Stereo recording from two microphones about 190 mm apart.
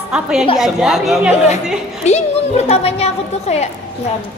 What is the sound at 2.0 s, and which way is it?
A woman's voice, 35° left (ahead or behind).